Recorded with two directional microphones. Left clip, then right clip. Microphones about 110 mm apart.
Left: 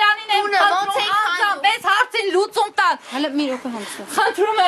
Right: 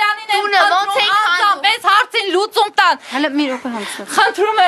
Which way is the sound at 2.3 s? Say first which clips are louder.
Right 5 dB; 20° right (ahead or behind).